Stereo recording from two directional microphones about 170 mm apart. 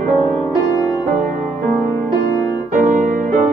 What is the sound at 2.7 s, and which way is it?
Music, 45° right (ahead or behind).